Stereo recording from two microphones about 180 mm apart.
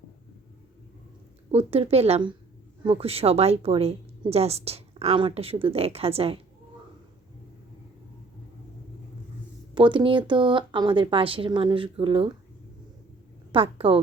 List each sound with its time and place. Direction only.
1.5 s a woman's voice: 30° right (ahead or behind)
9.7 s speech: 25° right (ahead or behind)
13.5 s a woman's voice: 30° right (ahead or behind)